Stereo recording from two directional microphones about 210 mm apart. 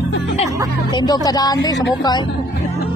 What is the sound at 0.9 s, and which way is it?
Speech, 20° left (ahead or behind).